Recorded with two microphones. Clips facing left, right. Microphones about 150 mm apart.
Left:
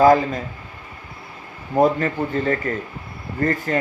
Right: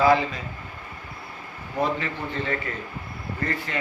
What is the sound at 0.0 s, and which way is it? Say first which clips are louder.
Speech: left 6 dB; 45° left (ahead or behind).